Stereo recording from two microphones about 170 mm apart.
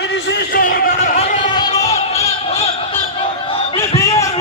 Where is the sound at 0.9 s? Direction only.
40° left (ahead or behind).